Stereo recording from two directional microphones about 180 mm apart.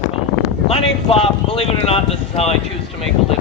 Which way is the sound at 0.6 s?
35° left (ahead or behind).